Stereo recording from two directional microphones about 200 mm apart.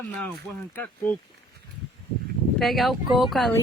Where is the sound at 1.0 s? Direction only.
5° left (ahead or behind).